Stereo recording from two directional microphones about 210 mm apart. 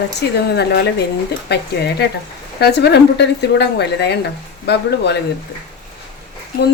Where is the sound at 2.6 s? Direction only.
50° left (ahead or behind).